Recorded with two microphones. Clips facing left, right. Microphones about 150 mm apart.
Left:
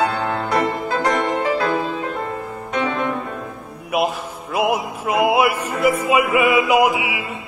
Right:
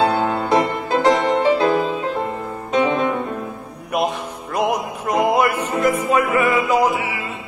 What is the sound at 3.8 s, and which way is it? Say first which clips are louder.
Music: left 1 dB; 5° left (ahead or behind).